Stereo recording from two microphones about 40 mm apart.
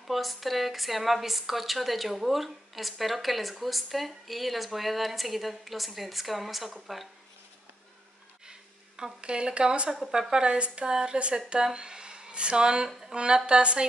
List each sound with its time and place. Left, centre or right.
0.0 s a woman's voice: centre
8.5 s speech: centre
9.8 s a woman's voice: centre
10.1 s speech: centre